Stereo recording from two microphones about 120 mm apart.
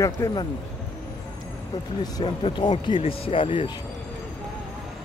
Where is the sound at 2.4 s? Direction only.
40° left (ahead or behind).